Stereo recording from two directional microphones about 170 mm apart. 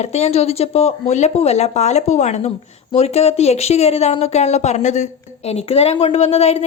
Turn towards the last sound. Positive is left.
turn(degrees=40)  # may be behind; listen again after turning